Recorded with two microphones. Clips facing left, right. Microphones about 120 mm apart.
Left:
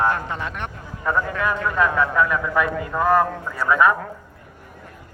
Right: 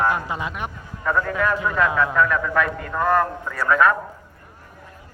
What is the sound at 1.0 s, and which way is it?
A man's voice, 15° left (ahead or behind).